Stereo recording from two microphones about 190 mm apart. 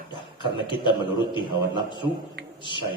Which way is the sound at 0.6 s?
25° left (ahead or behind).